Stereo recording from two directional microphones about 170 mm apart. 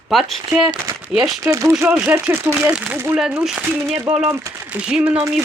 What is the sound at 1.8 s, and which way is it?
Speech, 5° right (ahead or behind).